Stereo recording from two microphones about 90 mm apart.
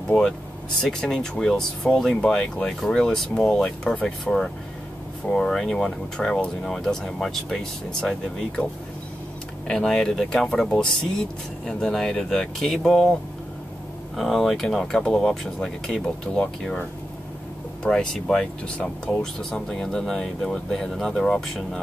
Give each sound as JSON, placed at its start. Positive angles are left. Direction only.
{"t": 0.8, "sound": "speech", "side_deg": 0}
{"t": 9.7, "sound": "speech", "side_deg": 5}
{"t": 14.1, "sound": "speech", "side_deg": 0}
{"t": 17.8, "sound": "speech", "side_deg": 10}